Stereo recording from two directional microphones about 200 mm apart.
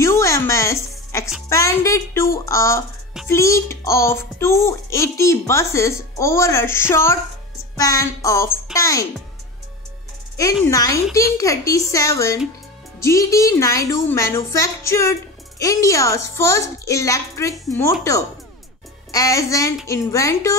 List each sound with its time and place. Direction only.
0.0 s music: 15° left (ahead or behind)
1.5 s a child's voice: 15° left (ahead or behind)
10.3 s a child's voice: 15° left (ahead or behind)
19.1 s a child's voice: 15° left (ahead or behind)